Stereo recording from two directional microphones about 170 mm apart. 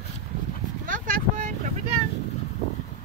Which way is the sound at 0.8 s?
55° right (ahead or behind).